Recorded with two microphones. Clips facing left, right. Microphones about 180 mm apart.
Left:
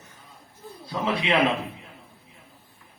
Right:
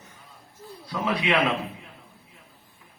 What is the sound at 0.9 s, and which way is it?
Speech, 25° left (ahead or behind).